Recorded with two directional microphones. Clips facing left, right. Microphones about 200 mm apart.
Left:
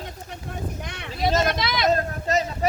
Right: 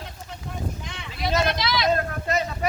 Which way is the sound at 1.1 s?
45° left (ahead or behind).